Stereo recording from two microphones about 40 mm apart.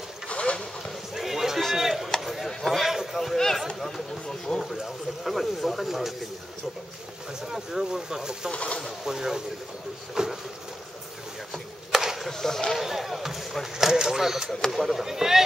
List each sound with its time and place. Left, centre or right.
0.3 s vehicle: left
1.1 s basketball bounce: centre
1.8 s chop: centre
2.2 s a sound: centre
2.9 s a sound: centre
3.2 s a sound: centre
4.5 s speech: centre
7.5 s speech: centre
8.5 s speech: left
9.0 s speech: centre
10.2 s boat: centre
12.0 s a sound: centre
12.3 s speech: centre
12.7 s speech: centre